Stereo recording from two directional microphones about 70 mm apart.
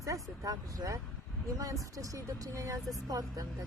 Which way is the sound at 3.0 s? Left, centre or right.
Right.